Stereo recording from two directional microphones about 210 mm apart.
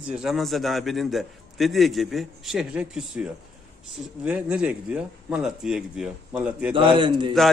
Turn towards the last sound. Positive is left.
turn(degrees=-25)  # may be behind; listen again after turning